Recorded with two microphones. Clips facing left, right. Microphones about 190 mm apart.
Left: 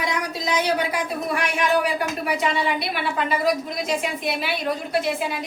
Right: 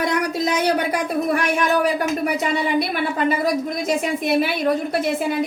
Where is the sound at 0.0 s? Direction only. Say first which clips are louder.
Right 6 dB; 55° right (ahead or behind).